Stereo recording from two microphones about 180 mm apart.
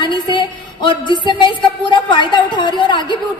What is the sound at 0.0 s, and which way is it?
A woman's voice, 25° left (ahead or behind).